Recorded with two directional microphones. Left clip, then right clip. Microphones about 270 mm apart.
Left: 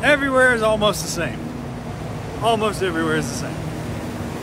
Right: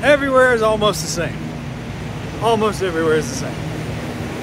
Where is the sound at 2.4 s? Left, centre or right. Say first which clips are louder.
Right 2 dB; centre.